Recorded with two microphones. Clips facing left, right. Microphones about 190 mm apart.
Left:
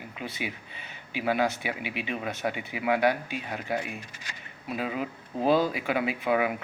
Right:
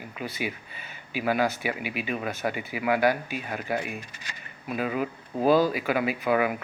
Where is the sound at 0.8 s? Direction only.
20° left (ahead or behind).